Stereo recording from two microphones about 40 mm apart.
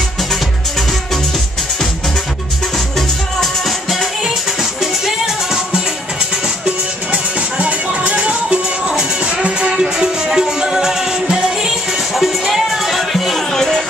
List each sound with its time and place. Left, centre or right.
5.0 s music: centre
7.1 s music: right; by 11.7 s centre
12.2 s music: centre